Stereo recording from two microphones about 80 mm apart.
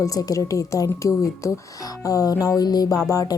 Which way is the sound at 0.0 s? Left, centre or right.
Left.